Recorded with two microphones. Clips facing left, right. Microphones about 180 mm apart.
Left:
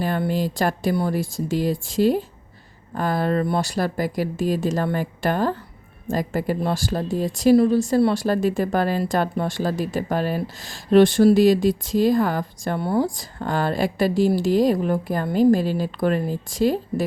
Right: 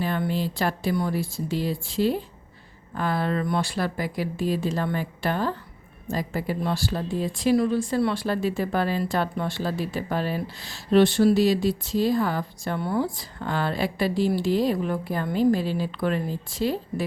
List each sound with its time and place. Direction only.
0.0 s speech: 45° left (ahead or behind)